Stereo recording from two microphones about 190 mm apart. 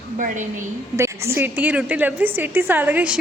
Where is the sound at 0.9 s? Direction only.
15° right (ahead or behind).